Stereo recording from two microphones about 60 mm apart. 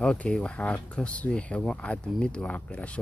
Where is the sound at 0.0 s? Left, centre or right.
Centre.